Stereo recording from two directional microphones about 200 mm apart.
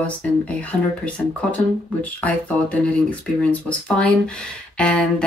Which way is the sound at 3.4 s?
5° left (ahead or behind).